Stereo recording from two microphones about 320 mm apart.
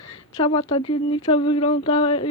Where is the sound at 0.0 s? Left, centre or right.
Centre.